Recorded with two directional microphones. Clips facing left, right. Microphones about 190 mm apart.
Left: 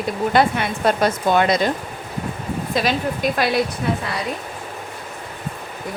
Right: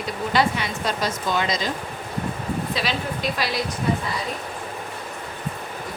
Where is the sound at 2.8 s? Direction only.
50° left (ahead or behind).